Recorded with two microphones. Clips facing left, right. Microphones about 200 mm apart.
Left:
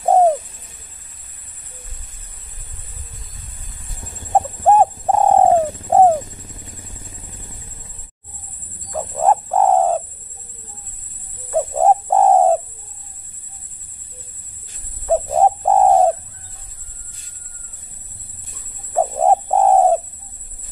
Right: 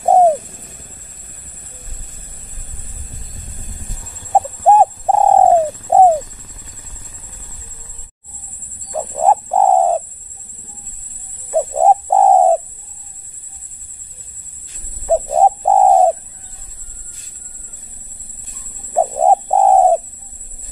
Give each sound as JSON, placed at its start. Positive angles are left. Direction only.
{"t": 0.0, "sound": "bird", "side_deg": -10}
{"t": 0.4, "sound": "a sound", "side_deg": -50}
{"t": 4.3, "sound": "bird", "side_deg": -15}
{"t": 8.9, "sound": "bird", "side_deg": -15}
{"t": 11.5, "sound": "bird", "side_deg": -15}
{"t": 15.3, "sound": "bird", "side_deg": -15}
{"t": 18.9, "sound": "bird", "side_deg": -15}